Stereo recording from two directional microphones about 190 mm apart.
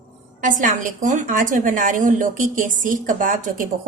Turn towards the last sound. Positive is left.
turn(degrees=-45)  # may be behind; listen again after turning